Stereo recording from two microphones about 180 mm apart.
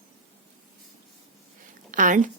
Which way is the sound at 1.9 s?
45° right (ahead or behind).